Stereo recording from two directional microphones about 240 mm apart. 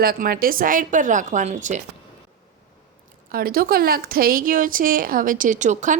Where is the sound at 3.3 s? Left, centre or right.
Right.